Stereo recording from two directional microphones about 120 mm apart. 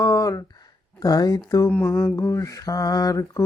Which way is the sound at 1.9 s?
30° left (ahead or behind).